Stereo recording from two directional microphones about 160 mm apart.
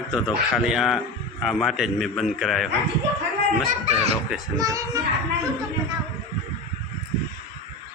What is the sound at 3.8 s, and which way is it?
Speech, 40° right (ahead or behind).